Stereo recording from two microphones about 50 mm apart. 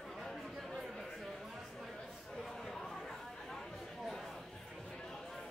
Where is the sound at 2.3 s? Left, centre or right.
Centre.